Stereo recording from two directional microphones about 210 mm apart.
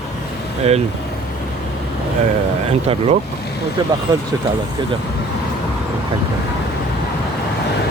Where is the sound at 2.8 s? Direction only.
30° right (ahead or behind).